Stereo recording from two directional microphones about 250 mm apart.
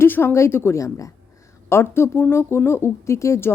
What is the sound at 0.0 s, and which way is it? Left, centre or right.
Speech, centre.